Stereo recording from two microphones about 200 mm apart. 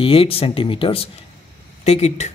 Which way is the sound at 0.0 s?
25° left (ahead or behind).